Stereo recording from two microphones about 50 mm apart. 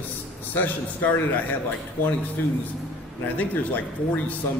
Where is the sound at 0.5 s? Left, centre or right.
Left.